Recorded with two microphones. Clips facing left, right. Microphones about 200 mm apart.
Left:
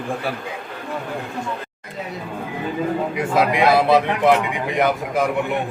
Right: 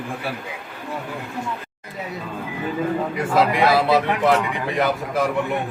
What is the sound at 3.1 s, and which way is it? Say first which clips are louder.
A man's voice: even; 15° left (ahead or behind).